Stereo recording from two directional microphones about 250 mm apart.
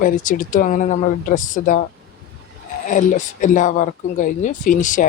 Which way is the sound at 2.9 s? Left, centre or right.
Left.